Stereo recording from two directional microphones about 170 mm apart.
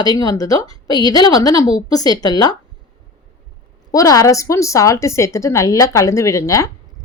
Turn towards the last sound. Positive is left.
turn(degrees=20)  # may be behind; listen again after turning